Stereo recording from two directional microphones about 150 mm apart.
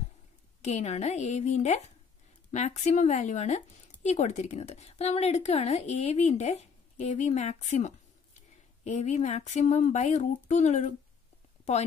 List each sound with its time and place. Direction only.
0.6 s speech: 45° left (ahead or behind)